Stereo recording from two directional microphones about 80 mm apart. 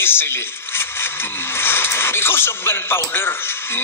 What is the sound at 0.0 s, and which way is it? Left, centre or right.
Speech, left.